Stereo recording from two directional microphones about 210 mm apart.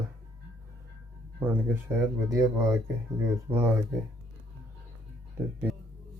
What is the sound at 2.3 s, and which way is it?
Speech, 15° right (ahead or behind).